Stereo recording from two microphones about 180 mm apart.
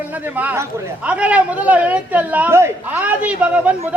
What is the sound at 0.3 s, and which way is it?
A man's voice, 10° right (ahead or behind).